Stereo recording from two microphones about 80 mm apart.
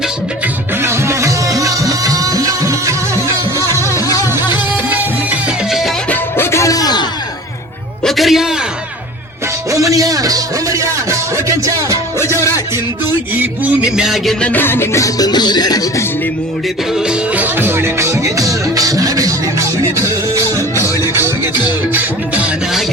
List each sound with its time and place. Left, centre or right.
0.8 s music: right
3.9 s music: left
4.7 s music: right
6.3 s music: left
8.0 s a sound: centre
9.7 s music: right
12.4 s music: left
13.8 s a man's voice: centre
14.4 s music: left
15.0 s music: left
17.1 s music: centre; by 19.6 s right
21.0 s music: right